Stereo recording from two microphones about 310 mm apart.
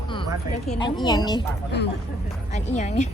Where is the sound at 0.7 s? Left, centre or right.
Centre.